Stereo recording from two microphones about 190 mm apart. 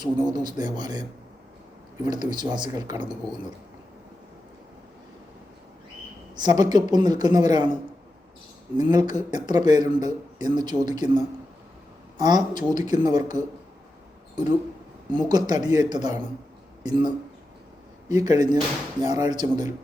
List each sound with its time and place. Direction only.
0.0 s speech: 25° right (ahead or behind)
2.0 s speech: 20° right (ahead or behind)
6.3 s speech: 20° right (ahead or behind)
8.8 s speech: 20° right (ahead or behind)
15.1 s speech: 20° right (ahead or behind)
18.1 s speech: 20° right (ahead or behind)